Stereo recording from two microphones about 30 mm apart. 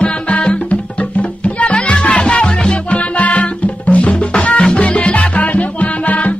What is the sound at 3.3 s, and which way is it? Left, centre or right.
Music, left.